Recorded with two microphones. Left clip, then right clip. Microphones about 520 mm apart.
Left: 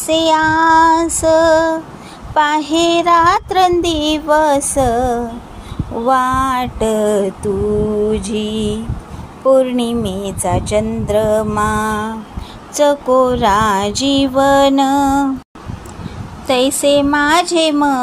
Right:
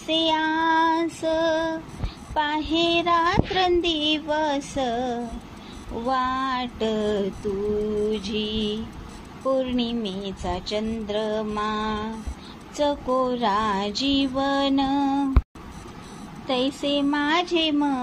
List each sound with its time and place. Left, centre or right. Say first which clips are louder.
0.0 s child singing: left 10 dB; right
16.4 s child singing: left 12 dB; right